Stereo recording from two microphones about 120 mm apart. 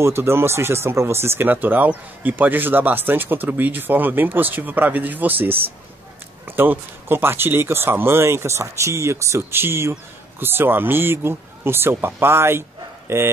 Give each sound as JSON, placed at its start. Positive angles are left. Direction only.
{"t": 0.0, "sound": "speech", "side_deg": -20}